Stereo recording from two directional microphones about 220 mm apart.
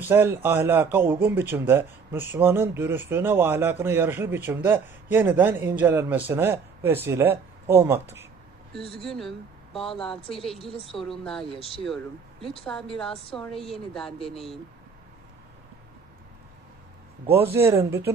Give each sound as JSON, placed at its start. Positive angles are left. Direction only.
{"t": 0.0, "sound": "a man's voice", "side_deg": -10}
{"t": 9.0, "sound": "a woman's voice", "side_deg": 0}
{"t": 13.1, "sound": "a woman's voice", "side_deg": 25}
{"t": 13.4, "sound": "a woman's voice", "side_deg": 0}
{"t": 17.3, "sound": "a man's voice", "side_deg": -10}